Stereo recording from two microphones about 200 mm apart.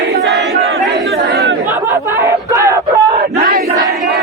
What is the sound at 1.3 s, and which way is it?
Chatter, 55° right (ahead or behind).